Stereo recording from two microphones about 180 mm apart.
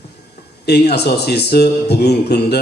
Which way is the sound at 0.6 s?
65° left (ahead or behind).